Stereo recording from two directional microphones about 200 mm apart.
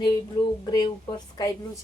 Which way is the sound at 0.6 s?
20° left (ahead or behind).